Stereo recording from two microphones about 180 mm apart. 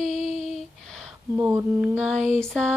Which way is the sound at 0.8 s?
Centre (ahead or behind).